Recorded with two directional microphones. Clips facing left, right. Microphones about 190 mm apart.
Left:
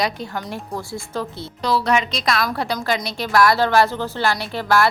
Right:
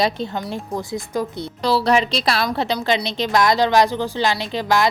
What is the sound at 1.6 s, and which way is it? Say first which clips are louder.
A woman's voice: right 2 dB; 30° right (ahead or behind).